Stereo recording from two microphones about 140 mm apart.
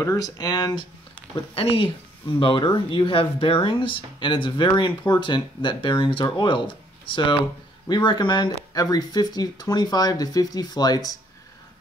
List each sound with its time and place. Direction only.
0.0 s speech: 25° left (ahead or behind)
1.5 s speech: 45° left (ahead or behind); by 11.1 s 25° left (ahead or behind)